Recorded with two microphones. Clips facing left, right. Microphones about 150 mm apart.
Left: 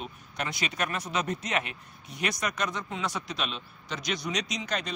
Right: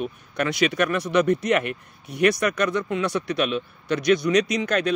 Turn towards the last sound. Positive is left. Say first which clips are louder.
# right 10 dB
turn(degrees=-60)  # may be behind; listen again after turning